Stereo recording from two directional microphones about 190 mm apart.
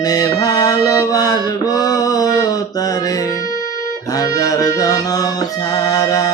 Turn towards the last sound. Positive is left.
turn(degrees=20)  # may be behind; listen again after turning